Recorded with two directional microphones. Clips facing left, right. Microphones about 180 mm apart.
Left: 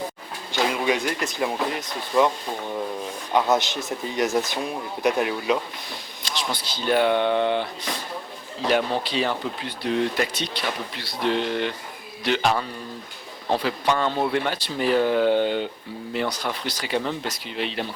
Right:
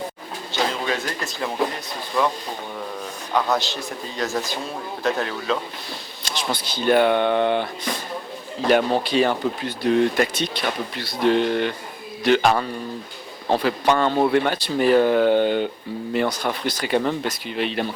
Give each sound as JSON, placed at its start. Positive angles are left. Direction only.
{"t": 0.7, "sound": "speech", "side_deg": 15}
{"t": 3.3, "sound": "a man's voice", "side_deg": 20}
{"t": 6.2, "sound": "speech", "side_deg": -55}